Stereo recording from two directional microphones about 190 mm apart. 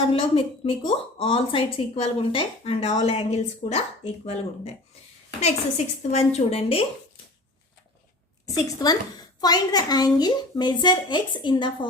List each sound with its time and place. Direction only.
0.1 s a woman's voice: 30° left (ahead or behind)
8.5 s a woman's voice: 20° left (ahead or behind)